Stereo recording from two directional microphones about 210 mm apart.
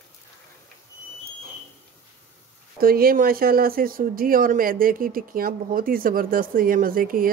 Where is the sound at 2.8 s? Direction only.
45° right (ahead or behind).